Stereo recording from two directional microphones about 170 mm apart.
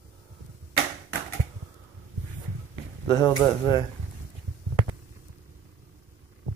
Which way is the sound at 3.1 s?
25° left (ahead or behind).